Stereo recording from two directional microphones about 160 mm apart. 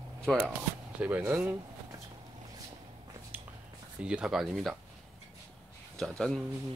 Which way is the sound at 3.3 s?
10° right (ahead or behind).